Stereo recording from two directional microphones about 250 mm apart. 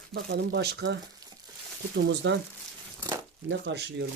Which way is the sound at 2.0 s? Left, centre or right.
Right.